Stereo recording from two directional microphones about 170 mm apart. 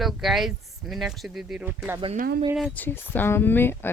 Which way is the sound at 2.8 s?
10° left (ahead or behind).